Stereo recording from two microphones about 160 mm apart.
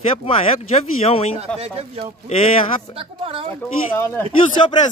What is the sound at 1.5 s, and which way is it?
A woman's voice, 40° right (ahead or behind).